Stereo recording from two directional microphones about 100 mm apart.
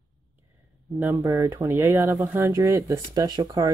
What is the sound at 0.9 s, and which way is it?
Speech, 25° right (ahead or behind).